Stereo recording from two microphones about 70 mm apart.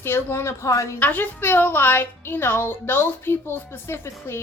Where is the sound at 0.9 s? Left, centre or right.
Left.